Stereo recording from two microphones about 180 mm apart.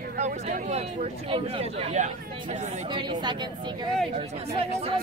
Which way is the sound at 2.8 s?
25° right (ahead or behind).